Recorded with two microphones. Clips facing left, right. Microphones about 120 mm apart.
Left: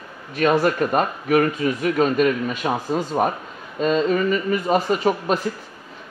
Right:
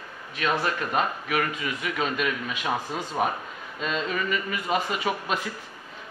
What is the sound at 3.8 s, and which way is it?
Speech, 40° left (ahead or behind).